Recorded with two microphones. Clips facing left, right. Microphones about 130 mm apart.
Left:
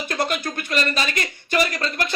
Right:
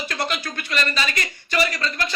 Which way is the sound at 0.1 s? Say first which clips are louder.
Left 6 dB; 50° left (ahead or behind).